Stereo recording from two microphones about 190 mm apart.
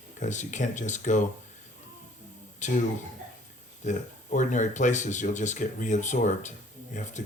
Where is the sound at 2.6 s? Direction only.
40° left (ahead or behind).